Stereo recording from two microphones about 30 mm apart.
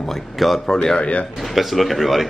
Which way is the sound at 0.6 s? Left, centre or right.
Left.